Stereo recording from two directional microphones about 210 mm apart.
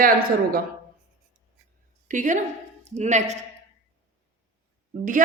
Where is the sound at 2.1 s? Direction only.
35° right (ahead or behind).